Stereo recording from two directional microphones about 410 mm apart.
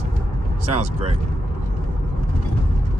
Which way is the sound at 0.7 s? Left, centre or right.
Centre.